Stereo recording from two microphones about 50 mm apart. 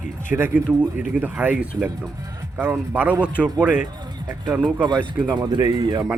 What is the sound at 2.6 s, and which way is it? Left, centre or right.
Speech, right.